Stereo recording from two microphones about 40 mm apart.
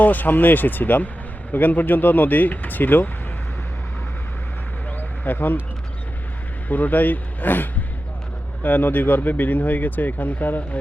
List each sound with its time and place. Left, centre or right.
0.0 s speech: left
4.9 s bird: left
6.7 s speech: left